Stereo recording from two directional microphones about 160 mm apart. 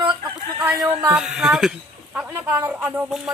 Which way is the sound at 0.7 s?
15° right (ahead or behind).